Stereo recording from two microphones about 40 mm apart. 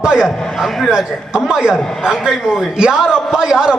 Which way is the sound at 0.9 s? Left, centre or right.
Centre.